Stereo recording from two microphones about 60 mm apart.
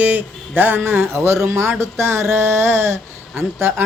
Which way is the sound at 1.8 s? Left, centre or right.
Right.